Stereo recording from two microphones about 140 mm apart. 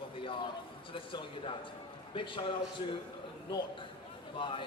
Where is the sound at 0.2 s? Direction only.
40° left (ahead or behind).